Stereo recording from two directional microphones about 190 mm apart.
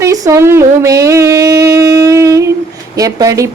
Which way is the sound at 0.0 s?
15° right (ahead or behind).